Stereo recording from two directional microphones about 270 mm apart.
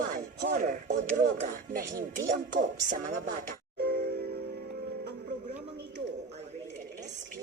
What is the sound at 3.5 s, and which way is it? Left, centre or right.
Music, right.